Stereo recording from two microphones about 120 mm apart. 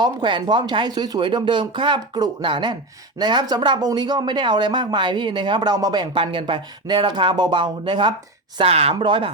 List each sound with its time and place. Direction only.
0.0 s speech: 40° right (ahead or behind)
8.5 s speech: 55° right (ahead or behind)